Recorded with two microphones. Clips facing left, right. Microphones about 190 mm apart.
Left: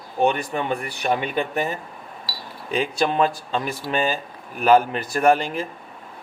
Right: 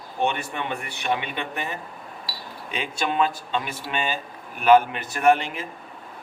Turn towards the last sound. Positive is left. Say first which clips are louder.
# left 2 dB
turn(degrees=35)  # may be behind; listen again after turning